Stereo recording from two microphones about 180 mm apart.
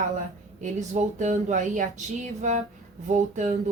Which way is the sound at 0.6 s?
45° right (ahead or behind).